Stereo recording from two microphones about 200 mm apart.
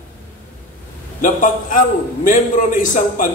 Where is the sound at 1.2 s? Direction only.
40° left (ahead or behind).